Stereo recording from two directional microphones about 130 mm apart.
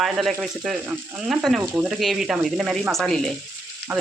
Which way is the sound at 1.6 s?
20° right (ahead or behind).